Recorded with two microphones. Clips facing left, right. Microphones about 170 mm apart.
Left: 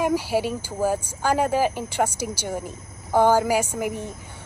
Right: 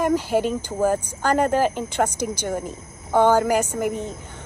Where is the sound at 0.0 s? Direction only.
10° left (ahead or behind).